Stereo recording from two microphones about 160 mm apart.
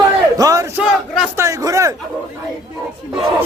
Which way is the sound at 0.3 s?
20° right (ahead or behind).